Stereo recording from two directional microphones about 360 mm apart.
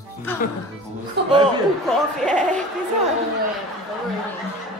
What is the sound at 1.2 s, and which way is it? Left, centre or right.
Speech, right.